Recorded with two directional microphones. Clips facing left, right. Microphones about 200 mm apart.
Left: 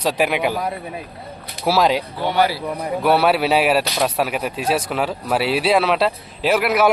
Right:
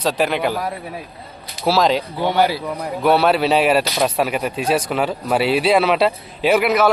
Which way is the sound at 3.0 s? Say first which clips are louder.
Right 1 dB; 5° left (ahead or behind).